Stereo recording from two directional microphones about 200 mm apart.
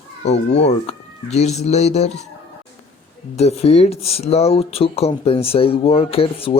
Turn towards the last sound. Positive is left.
turn(degrees=30)  # may be behind; listen again after turning